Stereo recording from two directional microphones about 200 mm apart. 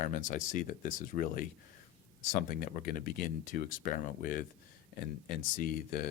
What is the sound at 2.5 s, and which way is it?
Speech, 40° left (ahead or behind).